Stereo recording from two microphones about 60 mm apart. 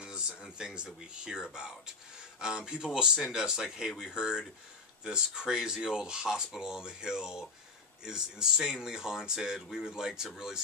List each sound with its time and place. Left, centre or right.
0.3 s speech: centre